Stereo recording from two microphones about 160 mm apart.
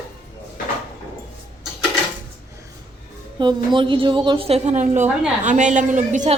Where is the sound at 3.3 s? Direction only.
30° right (ahead or behind).